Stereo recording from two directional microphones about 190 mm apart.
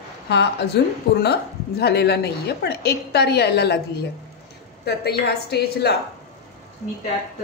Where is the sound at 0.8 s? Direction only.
60° left (ahead or behind).